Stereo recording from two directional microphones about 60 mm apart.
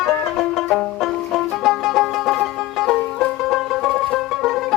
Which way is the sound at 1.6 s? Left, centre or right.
Centre.